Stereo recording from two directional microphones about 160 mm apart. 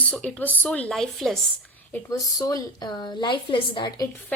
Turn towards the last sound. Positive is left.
turn(degrees=25)  # may be behind; listen again after turning